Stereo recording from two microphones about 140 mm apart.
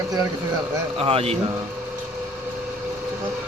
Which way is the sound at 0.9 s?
45° right (ahead or behind).